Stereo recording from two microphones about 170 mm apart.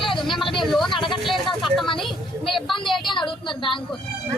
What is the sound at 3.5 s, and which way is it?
Speech, 30° left (ahead or behind).